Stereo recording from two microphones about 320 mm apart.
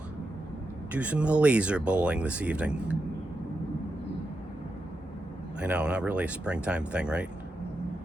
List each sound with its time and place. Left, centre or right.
0.9 s speech: centre
5.5 s speech: centre